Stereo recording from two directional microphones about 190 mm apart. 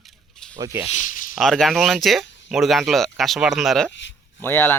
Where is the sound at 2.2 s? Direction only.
70° left (ahead or behind).